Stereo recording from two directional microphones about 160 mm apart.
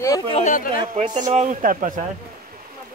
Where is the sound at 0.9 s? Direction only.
50° right (ahead or behind).